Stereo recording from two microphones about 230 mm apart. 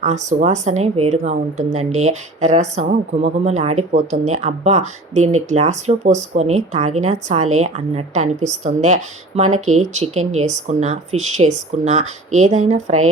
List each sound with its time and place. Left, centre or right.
0.0 s speech: right